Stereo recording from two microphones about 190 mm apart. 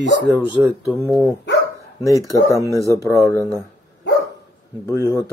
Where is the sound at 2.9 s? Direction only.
15° left (ahead or behind).